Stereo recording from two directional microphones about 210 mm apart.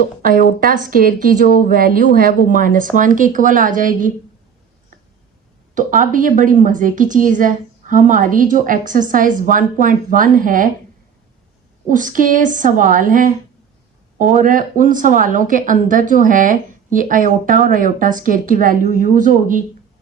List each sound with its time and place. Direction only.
0.2 s a woman's voice: 45° right (ahead or behind)
5.7 s a woman's voice: 40° right (ahead or behind)
11.9 s a woman's voice: 40° right (ahead or behind)